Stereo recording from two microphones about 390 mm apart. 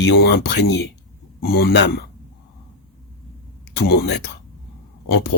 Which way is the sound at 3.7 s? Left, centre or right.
Left.